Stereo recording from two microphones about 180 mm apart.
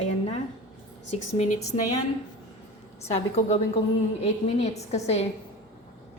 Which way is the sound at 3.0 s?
35° left (ahead or behind).